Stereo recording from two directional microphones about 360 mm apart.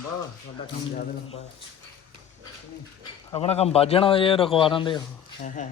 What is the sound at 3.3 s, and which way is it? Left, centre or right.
A man's voice, centre.